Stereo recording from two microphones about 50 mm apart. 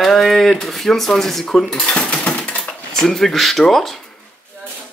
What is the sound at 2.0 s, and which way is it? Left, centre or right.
Coin, left.